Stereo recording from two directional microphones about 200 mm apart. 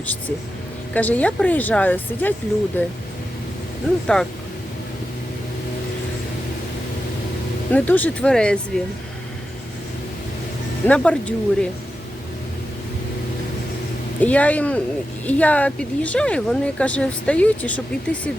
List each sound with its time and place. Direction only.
0.0 s speech: 10° left (ahead or behind)
4.0 s speech: 5° left (ahead or behind)
7.7 s speech: 10° left (ahead or behind)
10.8 s speech: 5° left (ahead or behind)
14.2 s speech: 5° left (ahead or behind)